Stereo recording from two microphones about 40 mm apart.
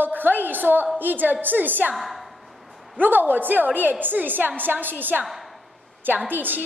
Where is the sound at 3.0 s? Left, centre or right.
Right.